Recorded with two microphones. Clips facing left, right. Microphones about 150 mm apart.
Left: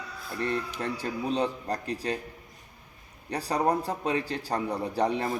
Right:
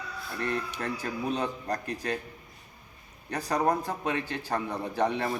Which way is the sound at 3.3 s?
35° left (ahead or behind).